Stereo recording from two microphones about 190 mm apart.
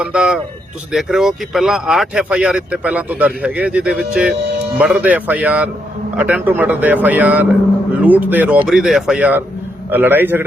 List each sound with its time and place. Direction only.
0.0 s speech: 5° right (ahead or behind)